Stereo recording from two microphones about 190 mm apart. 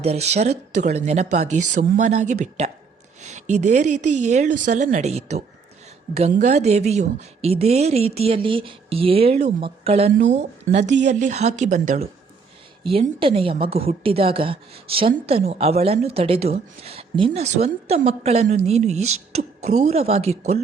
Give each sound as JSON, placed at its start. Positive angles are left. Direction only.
{"t": 0.0, "sound": "a woman's voice", "side_deg": -35}
{"t": 12.8, "sound": "a woman's voice", "side_deg": -30}
{"t": 19.0, "sound": "speech", "side_deg": -90}
{"t": 19.4, "sound": "a woman's voice", "side_deg": -35}